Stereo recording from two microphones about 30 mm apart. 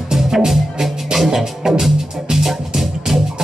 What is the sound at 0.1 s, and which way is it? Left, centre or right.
Music, centre.